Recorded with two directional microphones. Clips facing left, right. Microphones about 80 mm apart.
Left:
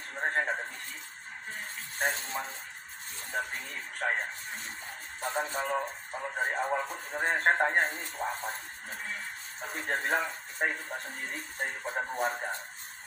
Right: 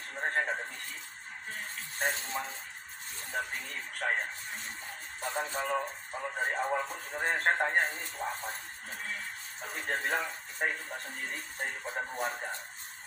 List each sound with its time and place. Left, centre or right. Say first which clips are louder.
0.2 s speech: left 1 dB; centre
2.0 s speech: left 1 dB; centre
5.2 s speech: left 2 dB; centre
9.6 s speech: left 2 dB; centre